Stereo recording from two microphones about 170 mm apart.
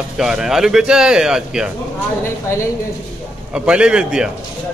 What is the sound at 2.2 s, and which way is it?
Speech, 15° left (ahead or behind).